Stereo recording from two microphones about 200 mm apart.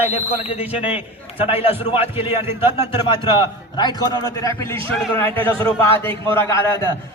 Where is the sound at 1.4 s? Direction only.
30° left (ahead or behind).